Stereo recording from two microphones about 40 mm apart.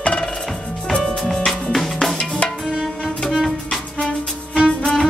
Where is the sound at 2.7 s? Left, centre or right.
Centre.